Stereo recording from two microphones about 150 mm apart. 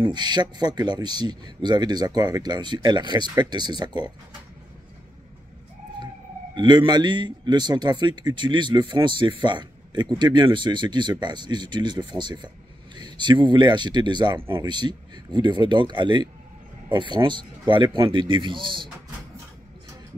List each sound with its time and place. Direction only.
0.0 s a man's voice: 30° right (ahead or behind)
6.5 s a man's voice: 30° right (ahead or behind)